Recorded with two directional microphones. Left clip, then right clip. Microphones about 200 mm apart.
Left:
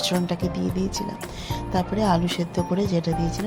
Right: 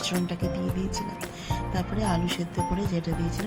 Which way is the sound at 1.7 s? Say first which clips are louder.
Left 8 dB; 20° left (ahead or behind).